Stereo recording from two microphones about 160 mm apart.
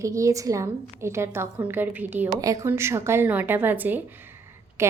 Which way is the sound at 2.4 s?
20° right (ahead or behind).